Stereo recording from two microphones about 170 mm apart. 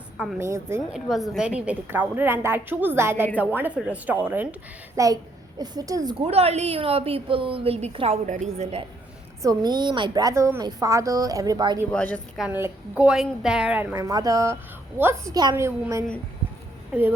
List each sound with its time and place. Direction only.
0.3 s a woman's voice: 15° right (ahead or behind)
0.9 s a woman's voice: centre (ahead or behind); by 6.1 s 20° right (ahead or behind)
6.1 s a woman's voice: 35° right (ahead or behind)
9.4 s a woman's voice: 20° right (ahead or behind)
11.9 s a woman's voice: 10° left (ahead or behind)
12.4 s a woman's voice: 10° right (ahead or behind)
13.9 s a woman's voice: 20° right (ahead or behind)